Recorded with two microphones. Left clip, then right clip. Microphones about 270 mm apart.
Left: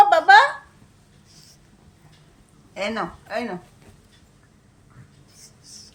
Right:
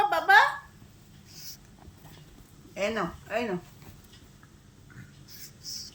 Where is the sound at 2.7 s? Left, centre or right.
Left.